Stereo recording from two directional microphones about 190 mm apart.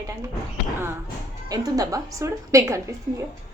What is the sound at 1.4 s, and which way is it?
A woman's voice, 20° right (ahead or behind).